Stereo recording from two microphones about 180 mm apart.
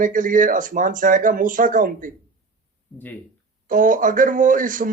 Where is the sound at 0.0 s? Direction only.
45° right (ahead or behind).